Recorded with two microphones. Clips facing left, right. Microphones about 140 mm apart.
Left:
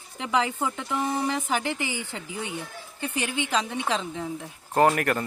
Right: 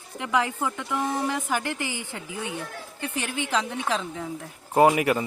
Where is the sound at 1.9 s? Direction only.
15° right (ahead or behind).